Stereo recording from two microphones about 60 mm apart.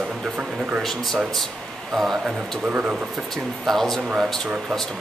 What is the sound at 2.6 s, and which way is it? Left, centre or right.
Speech, right.